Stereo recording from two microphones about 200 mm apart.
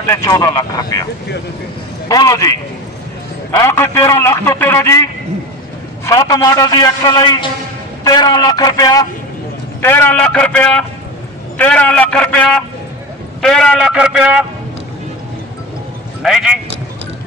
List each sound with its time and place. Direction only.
0.1 s a man's voice: 20° left (ahead or behind)
2.0 s a man's voice: 15° left (ahead or behind)
3.5 s a man's voice: 10° left (ahead or behind)
6.0 s a man's voice: 20° left (ahead or behind); by 14.3 s 5° right (ahead or behind)
16.2 s a man's voice: centre (ahead or behind)